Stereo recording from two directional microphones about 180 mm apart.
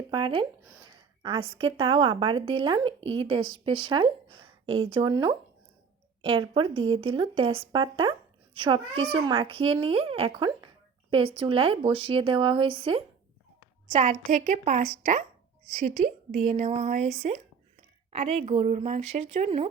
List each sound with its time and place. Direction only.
0.1 s speech: 30° right (ahead or behind)
1.5 s a woman's voice: 30° right (ahead or behind)